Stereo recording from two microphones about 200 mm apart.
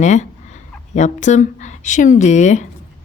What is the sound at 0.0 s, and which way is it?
A woman's voice, 35° left (ahead or behind).